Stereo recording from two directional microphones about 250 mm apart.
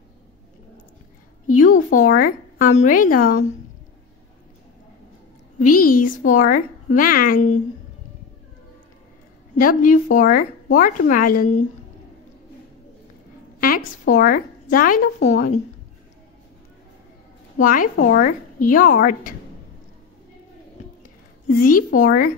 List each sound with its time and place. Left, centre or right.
1.6 s a woman's voice: left
5.8 s a woman's voice: left
9.6 s a woman's voice: left
13.6 s a woman's voice: left
17.6 s a woman's voice: left
21.5 s a woman's voice: left